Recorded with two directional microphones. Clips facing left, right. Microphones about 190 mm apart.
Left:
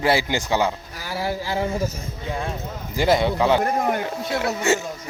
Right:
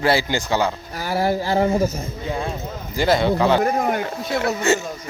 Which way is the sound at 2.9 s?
20° left (ahead or behind).